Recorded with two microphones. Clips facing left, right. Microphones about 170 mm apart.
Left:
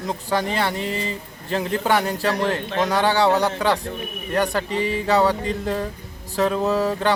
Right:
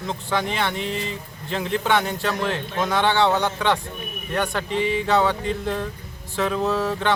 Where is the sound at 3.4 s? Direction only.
10° left (ahead or behind).